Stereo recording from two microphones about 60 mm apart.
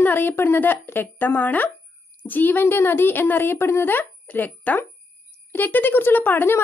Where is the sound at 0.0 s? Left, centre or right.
Left.